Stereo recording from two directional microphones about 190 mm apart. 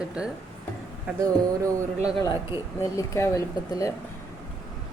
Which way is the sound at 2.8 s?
15° left (ahead or behind).